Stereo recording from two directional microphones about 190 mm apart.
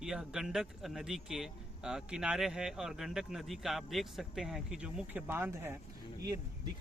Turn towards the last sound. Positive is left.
turn(degrees=-20)  # may be behind; listen again after turning